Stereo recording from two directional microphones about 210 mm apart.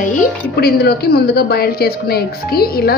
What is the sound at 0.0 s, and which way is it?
Speech, 35° left (ahead or behind).